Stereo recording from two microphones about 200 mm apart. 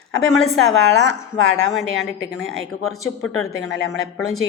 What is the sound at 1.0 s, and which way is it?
Speech, 65° right (ahead or behind).